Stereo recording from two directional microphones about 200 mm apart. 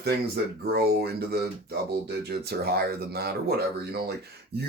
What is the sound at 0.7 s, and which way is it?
Speech, 50° right (ahead or behind).